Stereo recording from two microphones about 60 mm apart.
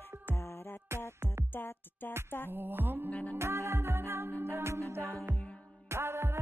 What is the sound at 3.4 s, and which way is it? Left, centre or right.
Music, right.